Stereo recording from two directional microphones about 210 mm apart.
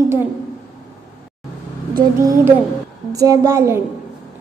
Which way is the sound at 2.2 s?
15° right (ahead or behind).